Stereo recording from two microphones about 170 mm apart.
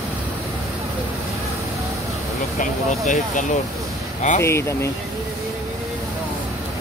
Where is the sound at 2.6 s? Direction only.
50° left (ahead or behind).